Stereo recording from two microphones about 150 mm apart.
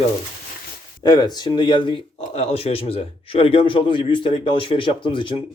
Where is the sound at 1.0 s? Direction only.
25° left (ahead or behind).